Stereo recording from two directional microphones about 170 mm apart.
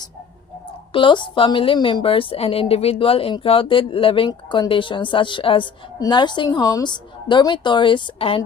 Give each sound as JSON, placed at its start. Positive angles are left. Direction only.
{"t": 0.9, "sound": "a woman's voice", "side_deg": 30}